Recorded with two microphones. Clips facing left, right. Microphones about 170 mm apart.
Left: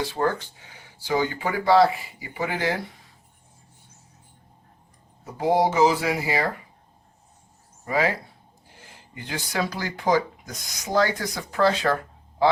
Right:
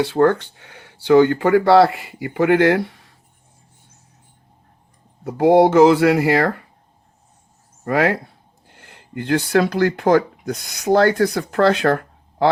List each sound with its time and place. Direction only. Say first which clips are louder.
0.0 s speech: right 9 dB; 65° right (ahead or behind)
5.2 s speech: right 9 dB; 65° right (ahead or behind)
7.9 s speech: right 6 dB; 65° right (ahead or behind)